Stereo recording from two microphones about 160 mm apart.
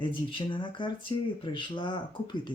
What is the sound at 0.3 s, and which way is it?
Speech, 30° left (ahead or behind).